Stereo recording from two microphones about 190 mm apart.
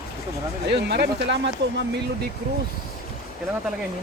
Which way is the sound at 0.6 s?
60° right (ahead or behind).